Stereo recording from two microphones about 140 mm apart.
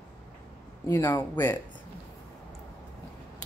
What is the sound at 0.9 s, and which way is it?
Speech, 15° left (ahead or behind).